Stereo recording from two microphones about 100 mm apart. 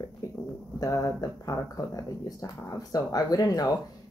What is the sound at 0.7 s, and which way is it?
Speech, 35° left (ahead or behind).